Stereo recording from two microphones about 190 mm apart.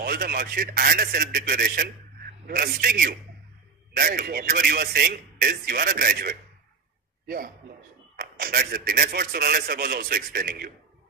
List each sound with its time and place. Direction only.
0.0 s a man's voice: 50° right (ahead or behind)